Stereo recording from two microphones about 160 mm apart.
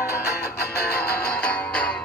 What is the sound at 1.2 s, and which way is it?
Music, 5° left (ahead or behind).